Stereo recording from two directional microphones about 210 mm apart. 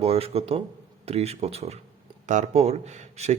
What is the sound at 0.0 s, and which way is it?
Speech, 30° right (ahead or behind).